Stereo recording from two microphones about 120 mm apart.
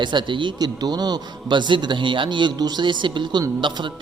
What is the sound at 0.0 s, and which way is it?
A man's voice, 40° right (ahead or behind).